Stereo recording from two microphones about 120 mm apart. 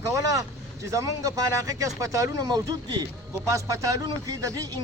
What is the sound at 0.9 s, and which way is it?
Speech, 25° right (ahead or behind).